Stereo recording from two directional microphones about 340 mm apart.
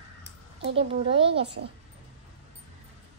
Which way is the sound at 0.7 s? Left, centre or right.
Centre.